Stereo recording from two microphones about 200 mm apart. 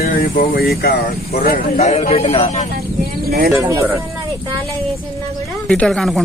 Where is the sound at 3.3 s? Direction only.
50° right (ahead or behind).